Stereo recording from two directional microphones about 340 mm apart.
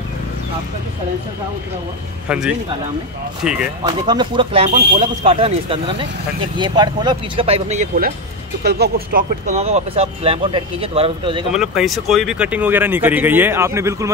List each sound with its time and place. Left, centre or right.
2.2 s speech: centre
4.0 s speech: centre
11.5 s speech: centre